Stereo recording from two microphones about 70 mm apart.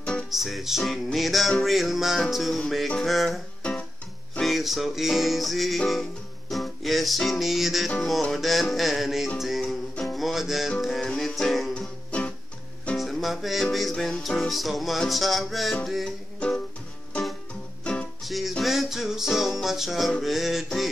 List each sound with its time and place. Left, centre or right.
0.3 s music: centre
3.6 s music: centre
4.4 s music: centre
11.7 s music: centre
12.9 s music: centre
16.3 s music: centre
18.2 s music: centre